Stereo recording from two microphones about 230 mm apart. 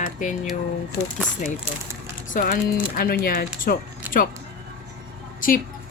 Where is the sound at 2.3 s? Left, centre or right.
Left.